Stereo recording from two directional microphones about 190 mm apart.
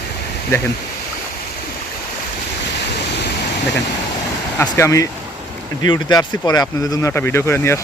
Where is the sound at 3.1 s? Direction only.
60° left (ahead or behind).